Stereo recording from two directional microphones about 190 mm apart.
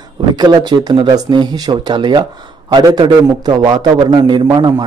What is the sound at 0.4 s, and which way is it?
A man's voice, 20° right (ahead or behind).